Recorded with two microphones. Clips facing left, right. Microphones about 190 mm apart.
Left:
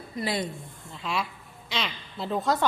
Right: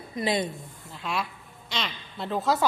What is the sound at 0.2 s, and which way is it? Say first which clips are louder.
Speech: right 3 dB; 20° right (ahead or behind).